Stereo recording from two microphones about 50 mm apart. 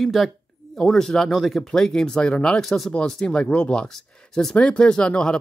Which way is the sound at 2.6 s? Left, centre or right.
Centre.